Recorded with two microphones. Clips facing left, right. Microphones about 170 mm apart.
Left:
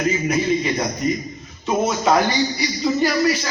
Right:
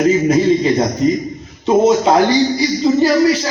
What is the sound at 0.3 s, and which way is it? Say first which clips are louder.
Speech: right 7 dB; 30° right (ahead or behind).